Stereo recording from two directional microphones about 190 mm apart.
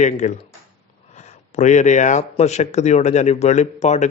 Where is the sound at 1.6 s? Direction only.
40° left (ahead or behind).